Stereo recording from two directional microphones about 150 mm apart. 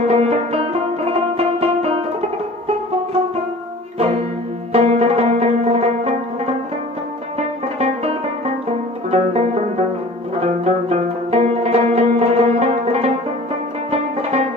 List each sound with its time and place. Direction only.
0.1 s music: 40° right (ahead or behind)
4.7 s music: 45° right (ahead or behind)
9.0 s music: 45° right (ahead or behind)
14.2 s music: 45° right (ahead or behind)